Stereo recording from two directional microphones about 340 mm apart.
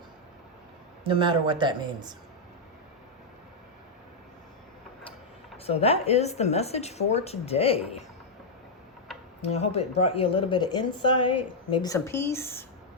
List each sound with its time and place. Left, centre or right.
1.0 s speech: centre
5.6 s speech: centre
9.4 s speech: centre